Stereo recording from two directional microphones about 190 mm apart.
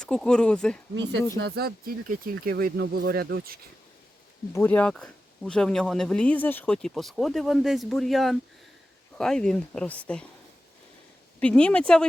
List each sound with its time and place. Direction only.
0.0 s speech: 5° left (ahead or behind)
1.4 s speech: 60° right (ahead or behind)
4.5 s speech: 10° left (ahead or behind)
11.3 s speech: 5° left (ahead or behind)